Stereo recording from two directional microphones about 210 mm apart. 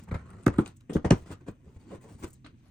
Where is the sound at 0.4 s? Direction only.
5° left (ahead or behind).